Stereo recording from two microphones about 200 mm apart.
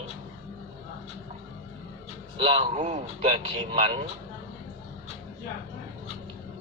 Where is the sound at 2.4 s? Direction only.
30° right (ahead or behind).